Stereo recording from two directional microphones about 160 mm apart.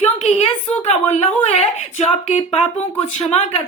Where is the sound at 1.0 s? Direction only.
40° left (ahead or behind).